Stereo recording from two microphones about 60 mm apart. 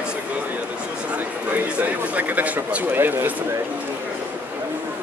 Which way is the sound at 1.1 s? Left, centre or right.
Right.